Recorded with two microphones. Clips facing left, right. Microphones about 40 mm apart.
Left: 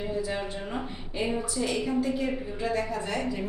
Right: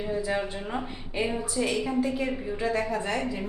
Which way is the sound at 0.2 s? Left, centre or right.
Centre.